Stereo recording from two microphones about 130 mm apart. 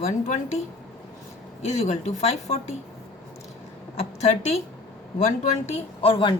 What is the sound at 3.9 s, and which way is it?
Speech, 55° left (ahead or behind).